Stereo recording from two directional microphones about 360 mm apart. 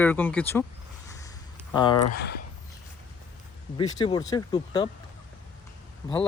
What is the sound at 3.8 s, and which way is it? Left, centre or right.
Speech, centre.